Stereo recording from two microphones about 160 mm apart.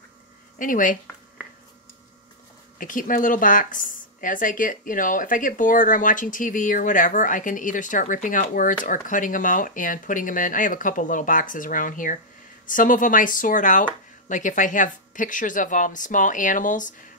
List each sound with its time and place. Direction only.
0.6 s a woman's voice: 55° left (ahead or behind)
2.8 s a woman's voice: 55° left (ahead or behind)